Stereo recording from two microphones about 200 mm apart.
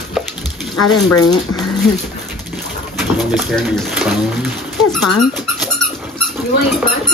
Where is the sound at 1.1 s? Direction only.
20° left (ahead or behind).